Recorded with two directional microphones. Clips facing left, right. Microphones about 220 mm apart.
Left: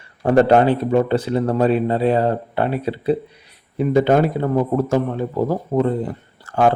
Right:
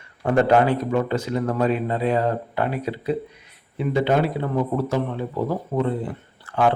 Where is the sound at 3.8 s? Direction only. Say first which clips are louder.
Left 5 dB; 45° left (ahead or behind).